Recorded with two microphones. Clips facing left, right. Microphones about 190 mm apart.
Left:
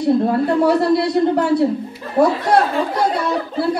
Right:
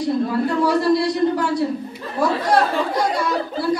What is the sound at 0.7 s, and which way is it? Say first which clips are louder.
Speech: left 2 dB; 60° left (ahead or behind).